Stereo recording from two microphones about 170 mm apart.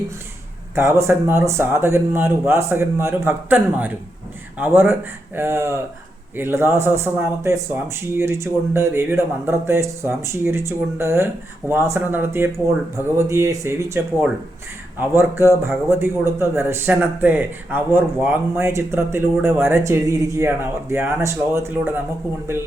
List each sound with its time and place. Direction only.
0.8 s a man's voice: 15° right (ahead or behind)